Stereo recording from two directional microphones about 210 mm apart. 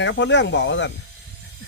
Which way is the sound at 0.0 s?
60° left (ahead or behind).